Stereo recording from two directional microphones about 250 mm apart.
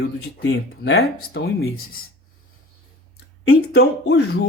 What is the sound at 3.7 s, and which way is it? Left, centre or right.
Speech, left.